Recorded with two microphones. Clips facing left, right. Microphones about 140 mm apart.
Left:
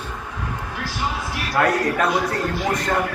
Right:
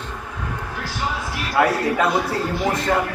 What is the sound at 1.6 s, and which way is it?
Speech, 15° right (ahead or behind).